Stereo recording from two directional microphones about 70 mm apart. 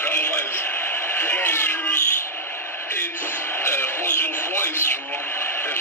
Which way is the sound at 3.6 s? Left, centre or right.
Left.